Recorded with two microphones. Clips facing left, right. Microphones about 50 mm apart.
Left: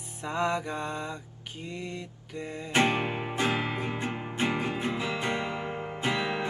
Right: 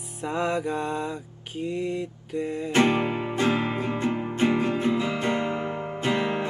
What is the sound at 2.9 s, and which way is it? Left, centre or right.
Music, centre.